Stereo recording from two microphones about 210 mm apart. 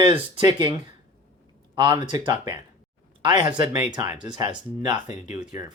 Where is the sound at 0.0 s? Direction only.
20° right (ahead or behind).